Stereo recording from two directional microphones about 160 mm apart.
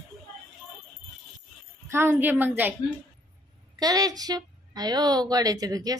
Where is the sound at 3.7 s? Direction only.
25° right (ahead or behind).